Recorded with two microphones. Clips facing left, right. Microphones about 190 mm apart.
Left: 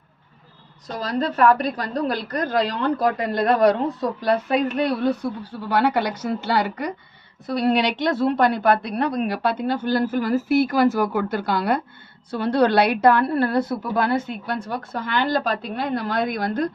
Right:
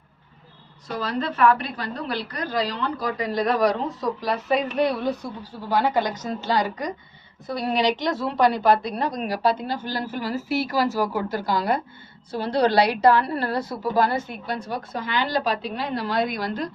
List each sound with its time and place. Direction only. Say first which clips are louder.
1.0 s a woman's voice: left 2 dB; 40° left (ahead or behind)